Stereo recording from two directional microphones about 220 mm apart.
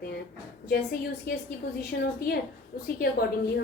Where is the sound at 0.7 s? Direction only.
45° left (ahead or behind).